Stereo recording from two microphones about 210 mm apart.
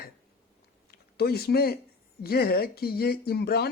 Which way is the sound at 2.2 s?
45° left (ahead or behind).